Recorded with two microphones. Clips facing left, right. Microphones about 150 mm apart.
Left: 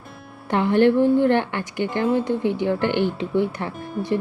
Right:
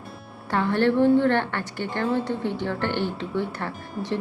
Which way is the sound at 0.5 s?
15° left (ahead or behind).